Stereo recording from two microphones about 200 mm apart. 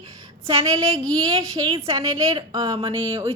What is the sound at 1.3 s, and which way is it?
Speech, 25° right (ahead or behind).